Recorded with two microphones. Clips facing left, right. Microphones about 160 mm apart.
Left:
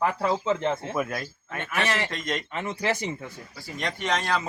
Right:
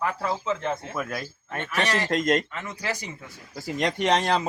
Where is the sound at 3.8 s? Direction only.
40° right (ahead or behind).